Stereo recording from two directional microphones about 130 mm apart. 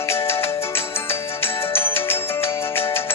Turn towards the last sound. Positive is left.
turn(degrees=20)  # may be behind; listen again after turning